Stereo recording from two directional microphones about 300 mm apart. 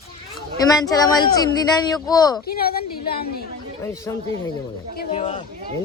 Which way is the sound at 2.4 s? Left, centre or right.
Left.